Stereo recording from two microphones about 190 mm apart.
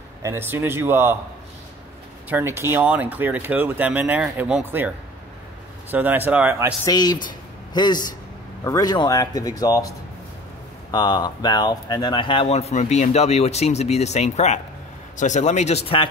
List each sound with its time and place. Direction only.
0.2 s speech: 15° right (ahead or behind)
2.2 s speech: 10° right (ahead or behind)
6.8 s speech: 20° left (ahead or behind)